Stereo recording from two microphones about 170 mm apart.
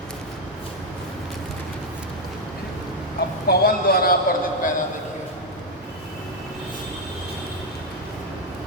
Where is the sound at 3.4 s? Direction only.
60° left (ahead or behind).